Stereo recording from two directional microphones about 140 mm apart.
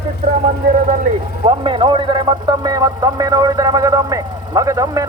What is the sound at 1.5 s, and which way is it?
Speech, 35° right (ahead or behind).